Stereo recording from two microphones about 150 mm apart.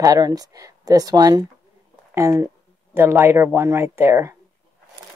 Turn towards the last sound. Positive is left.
turn(degrees=-15)  # may be behind; listen again after turning